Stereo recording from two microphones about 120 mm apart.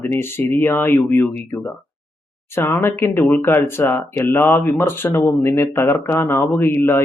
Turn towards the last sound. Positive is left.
turn(degrees=20)  # may be behind; listen again after turning